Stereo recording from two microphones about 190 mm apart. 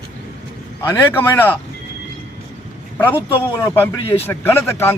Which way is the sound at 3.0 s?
10° left (ahead or behind).